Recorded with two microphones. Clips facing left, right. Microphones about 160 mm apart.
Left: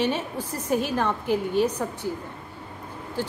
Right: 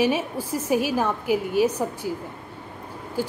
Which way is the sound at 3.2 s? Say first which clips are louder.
Right 3 dB; 10° right (ahead or behind).